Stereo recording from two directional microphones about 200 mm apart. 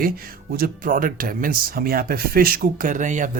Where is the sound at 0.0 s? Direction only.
45° right (ahead or behind).